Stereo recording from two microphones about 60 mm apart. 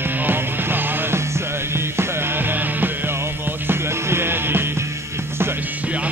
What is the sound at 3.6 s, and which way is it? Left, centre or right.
Music, right.